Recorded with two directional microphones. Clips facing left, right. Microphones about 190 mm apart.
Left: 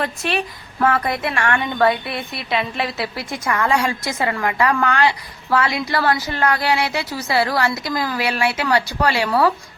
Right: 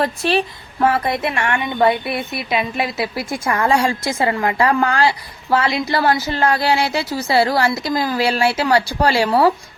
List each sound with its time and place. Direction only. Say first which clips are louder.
0.0 s a woman's voice: right 5 dB; 30° right (ahead or behind)